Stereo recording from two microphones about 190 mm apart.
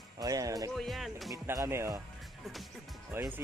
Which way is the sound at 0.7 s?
Centre (ahead or behind).